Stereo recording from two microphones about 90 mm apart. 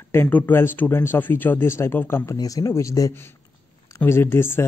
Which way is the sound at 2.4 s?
40° left (ahead or behind).